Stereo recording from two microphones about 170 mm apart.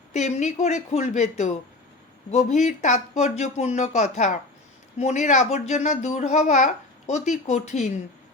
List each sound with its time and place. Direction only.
0.1 s speech: 45° left (ahead or behind)